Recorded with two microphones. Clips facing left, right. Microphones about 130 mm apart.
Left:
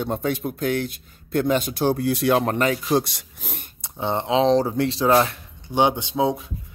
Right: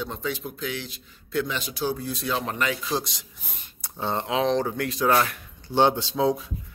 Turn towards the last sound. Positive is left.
turn(degrees=20)  # may be behind; listen again after turning